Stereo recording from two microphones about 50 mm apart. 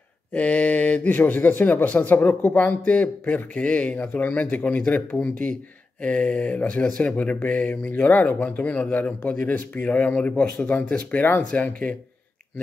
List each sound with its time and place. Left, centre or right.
0.3 s speech: left